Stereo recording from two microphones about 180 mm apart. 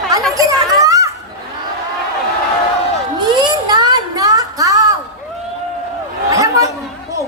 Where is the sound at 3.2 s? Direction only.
25° right (ahead or behind).